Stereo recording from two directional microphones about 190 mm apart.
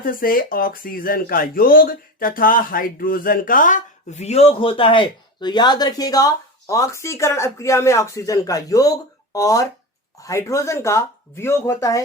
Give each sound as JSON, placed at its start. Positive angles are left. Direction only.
{"t": 0.0, "sound": "speech", "side_deg": 50}